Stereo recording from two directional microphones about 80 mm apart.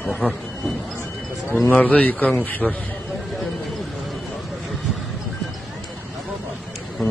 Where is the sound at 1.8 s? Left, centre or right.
Centre.